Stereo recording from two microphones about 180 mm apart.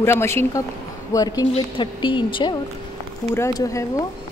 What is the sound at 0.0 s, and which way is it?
A woman's voice, 15° left (ahead or behind).